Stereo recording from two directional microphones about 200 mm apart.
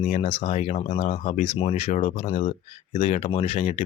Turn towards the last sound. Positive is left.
turn(degrees=30)  # may be behind; listen again after turning